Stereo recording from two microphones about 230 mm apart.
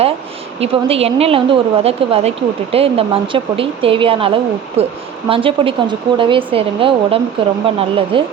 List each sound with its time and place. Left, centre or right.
0.6 s speech: right